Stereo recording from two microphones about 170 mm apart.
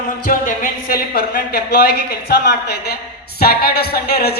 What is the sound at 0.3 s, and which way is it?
Speech, 55° left (ahead or behind).